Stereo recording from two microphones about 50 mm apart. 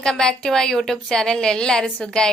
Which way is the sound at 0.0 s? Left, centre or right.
Centre.